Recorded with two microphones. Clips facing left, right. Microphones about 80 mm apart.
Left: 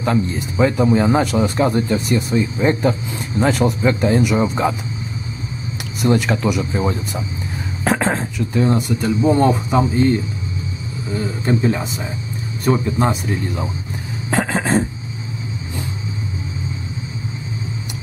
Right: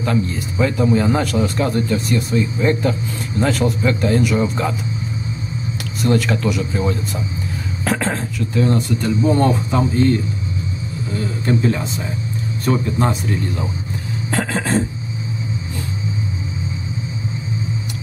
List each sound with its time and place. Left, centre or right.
0.0 s speech: left
6.0 s speech: left